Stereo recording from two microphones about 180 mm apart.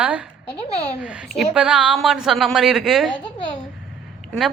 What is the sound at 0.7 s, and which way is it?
Speech, 35° left (ahead or behind).